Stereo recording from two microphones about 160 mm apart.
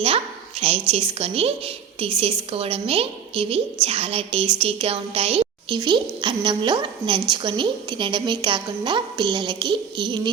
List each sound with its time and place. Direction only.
0.6 s a woman's voice: 40° right (ahead or behind)